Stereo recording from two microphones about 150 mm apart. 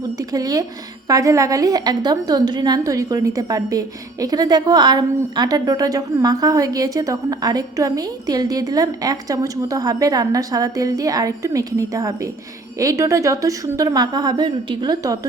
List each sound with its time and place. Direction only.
0.2 s a woman's voice: 25° right (ahead or behind)